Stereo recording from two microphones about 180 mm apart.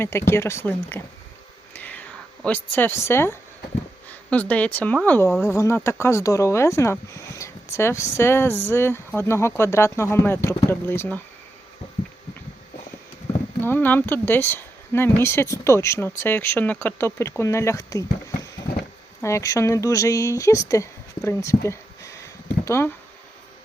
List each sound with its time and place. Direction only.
0.0 s speech: 15° left (ahead or behind)
1.7 s whispering: 10° left (ahead or behind)
4.1 s speech: 10° left (ahead or behind)
13.6 s speech: 10° left (ahead or behind)
21.2 s a sound: 15° left (ahead or behind)